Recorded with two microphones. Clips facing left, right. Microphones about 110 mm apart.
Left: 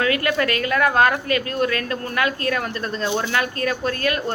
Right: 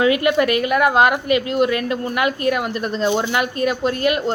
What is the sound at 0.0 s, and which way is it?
Speech, 20° right (ahead or behind).